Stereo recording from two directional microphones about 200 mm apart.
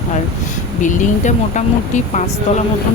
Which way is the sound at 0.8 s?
40° left (ahead or behind).